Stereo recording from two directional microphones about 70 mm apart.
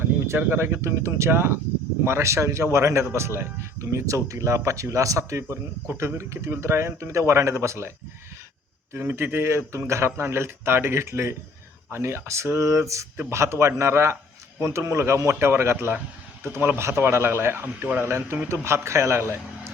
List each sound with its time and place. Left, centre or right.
0.0 s a man's voice: right
9.0 s a man's voice: right
16.4 s a man's voice: right
16.7 s speech: right